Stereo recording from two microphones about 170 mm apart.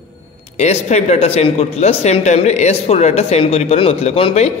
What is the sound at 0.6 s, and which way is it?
Speech, 40° left (ahead or behind).